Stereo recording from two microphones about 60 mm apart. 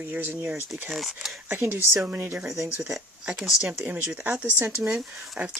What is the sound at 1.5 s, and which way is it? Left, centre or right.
Speech, right.